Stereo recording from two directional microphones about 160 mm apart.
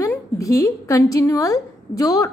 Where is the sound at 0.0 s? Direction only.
20° left (ahead or behind).